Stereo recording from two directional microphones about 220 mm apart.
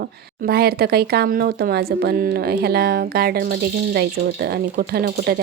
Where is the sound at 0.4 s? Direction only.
45° right (ahead or behind).